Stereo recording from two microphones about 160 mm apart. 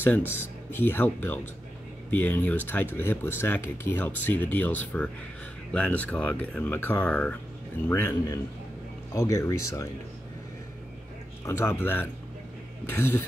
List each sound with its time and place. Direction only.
0.0 s a man's voice: 10° left (ahead or behind)
11.4 s speech: 15° left (ahead or behind)